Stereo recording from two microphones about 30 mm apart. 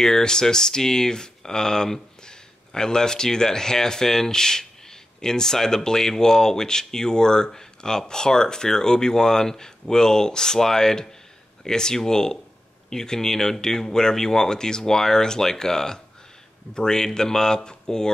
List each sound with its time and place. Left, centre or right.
0.0 s speech: left